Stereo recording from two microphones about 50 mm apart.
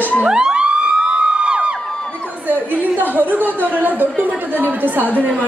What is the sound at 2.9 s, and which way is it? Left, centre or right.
Speech, right.